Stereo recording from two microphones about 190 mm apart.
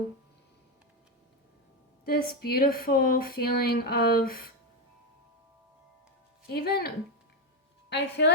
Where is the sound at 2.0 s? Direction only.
55° left (ahead or behind).